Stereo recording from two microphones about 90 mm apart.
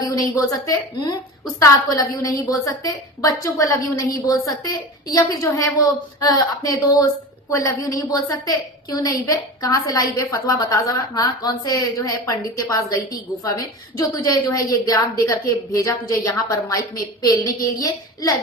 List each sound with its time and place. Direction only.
0.0 s a woman's voice: 40° left (ahead or behind)